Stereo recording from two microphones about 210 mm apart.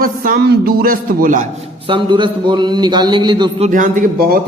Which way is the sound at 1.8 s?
25° right (ahead or behind).